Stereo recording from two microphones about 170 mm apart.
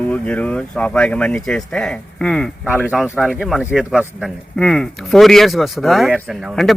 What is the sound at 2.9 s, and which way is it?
Speech, centre (ahead or behind).